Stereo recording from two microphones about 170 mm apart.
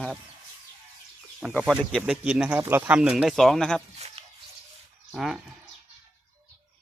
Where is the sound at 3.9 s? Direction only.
40° right (ahead or behind).